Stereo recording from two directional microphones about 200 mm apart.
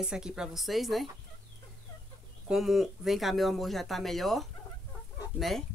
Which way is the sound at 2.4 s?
Centre (ahead or behind).